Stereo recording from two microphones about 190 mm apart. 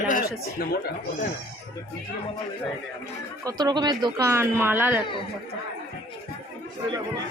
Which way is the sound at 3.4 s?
20° right (ahead or behind).